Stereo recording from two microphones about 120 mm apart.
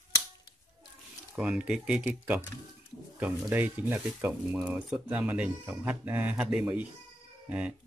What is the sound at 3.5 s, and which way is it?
Speech, 15° right (ahead or behind).